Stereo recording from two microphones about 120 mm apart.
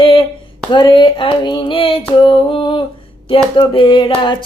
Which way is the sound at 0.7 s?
40° left (ahead or behind).